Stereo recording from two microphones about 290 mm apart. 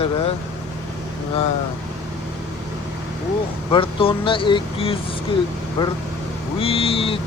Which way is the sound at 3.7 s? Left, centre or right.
Centre.